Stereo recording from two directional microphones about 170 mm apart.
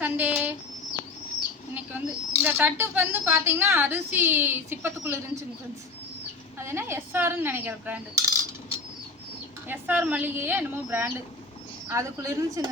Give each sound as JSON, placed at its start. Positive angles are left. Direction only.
{"t": 0.0, "sound": "a sound", "side_deg": -10}
{"t": 1.7, "sound": "speech", "side_deg": -10}
{"t": 6.6, "sound": "speech", "side_deg": -15}
{"t": 9.6, "sound": "speech", "side_deg": -10}